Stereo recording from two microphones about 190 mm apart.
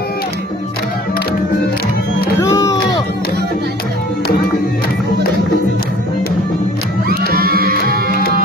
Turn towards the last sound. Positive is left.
turn(degrees=-50)  # may be behind; listen again after turning